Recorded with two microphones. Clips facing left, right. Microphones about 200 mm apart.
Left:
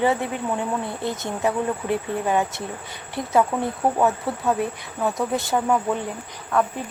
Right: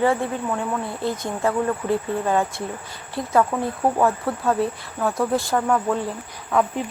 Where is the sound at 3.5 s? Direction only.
5° left (ahead or behind).